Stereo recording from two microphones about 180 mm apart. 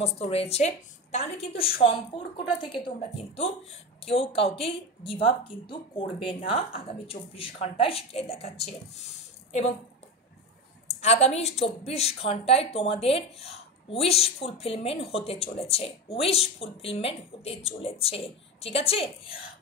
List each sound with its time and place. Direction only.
0.0 s speech: 35° left (ahead or behind)
10.9 s a woman's voice: 35° left (ahead or behind)